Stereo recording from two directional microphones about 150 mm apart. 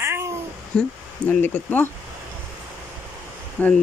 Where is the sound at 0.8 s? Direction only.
10° left (ahead or behind).